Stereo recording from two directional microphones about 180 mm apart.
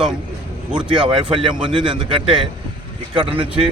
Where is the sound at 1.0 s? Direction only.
30° right (ahead or behind).